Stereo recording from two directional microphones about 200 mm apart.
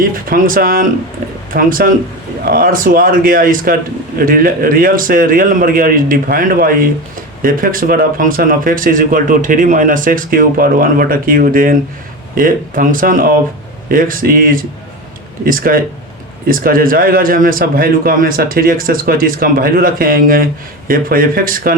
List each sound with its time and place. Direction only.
0.0 s a man's voice: 45° right (ahead or behind)